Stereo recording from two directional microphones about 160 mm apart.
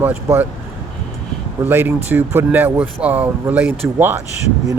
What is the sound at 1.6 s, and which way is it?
Speech, 10° right (ahead or behind).